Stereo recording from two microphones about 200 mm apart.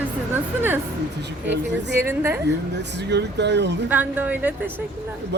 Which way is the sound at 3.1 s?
60° right (ahead or behind).